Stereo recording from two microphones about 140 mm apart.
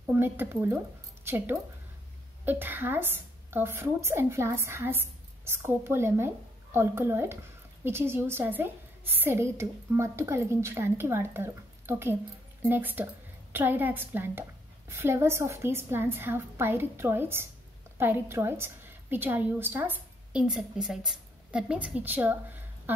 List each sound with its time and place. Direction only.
0.1 s a woman's voice: 15° right (ahead or behind)